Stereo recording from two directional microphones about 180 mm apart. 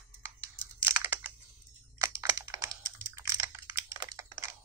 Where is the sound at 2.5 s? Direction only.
20° right (ahead or behind).